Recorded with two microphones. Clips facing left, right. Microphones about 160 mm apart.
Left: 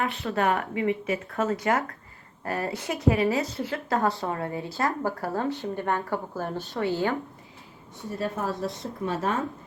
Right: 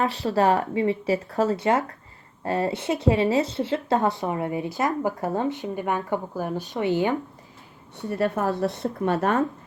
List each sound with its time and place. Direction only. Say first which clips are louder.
0.0 s speech: right 4 dB; 35° right (ahead or behind); by 7.2 s 20° right (ahead or behind)
8.2 s a woman's voice: right 6 dB; 70° right (ahead or behind)